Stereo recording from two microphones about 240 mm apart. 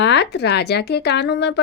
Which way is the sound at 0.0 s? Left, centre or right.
Left.